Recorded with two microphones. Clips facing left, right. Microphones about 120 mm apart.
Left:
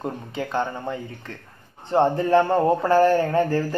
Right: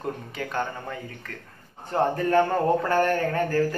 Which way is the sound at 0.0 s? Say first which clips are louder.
Left 3 dB; 25° left (ahead or behind).